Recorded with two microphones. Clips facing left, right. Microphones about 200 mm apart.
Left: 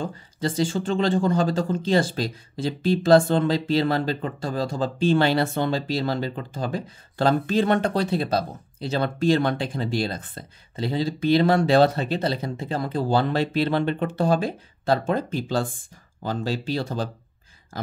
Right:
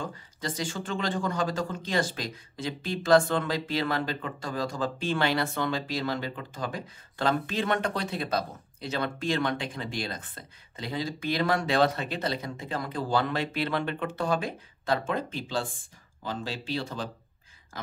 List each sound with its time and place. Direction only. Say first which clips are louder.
0.0 s speech: left 7 dB; 30° left (ahead or behind)